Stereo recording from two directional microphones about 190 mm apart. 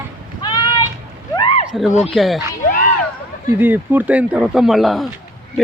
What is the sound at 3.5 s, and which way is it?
Speech, 10° right (ahead or behind).